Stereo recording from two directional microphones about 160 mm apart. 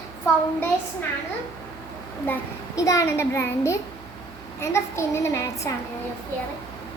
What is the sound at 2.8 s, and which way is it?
A child's voice, 20° left (ahead or behind).